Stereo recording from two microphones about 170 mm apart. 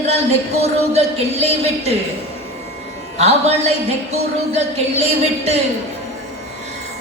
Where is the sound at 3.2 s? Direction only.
40° right (ahead or behind).